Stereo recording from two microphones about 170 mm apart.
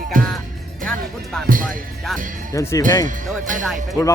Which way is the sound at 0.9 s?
5° left (ahead or behind).